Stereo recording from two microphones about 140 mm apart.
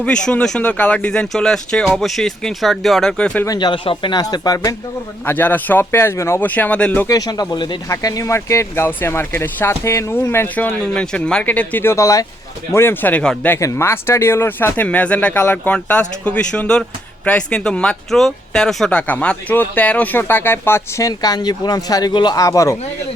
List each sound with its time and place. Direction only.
0.0 s speech: 5° left (ahead or behind)
3.4 s speech: 30° left (ahead or behind)
5.2 s speech: 15° left (ahead or behind)
7.1 s speech: 25° left (ahead or behind); by 13.6 s 10° left (ahead or behind)
13.6 s speech: 20° left (ahead or behind)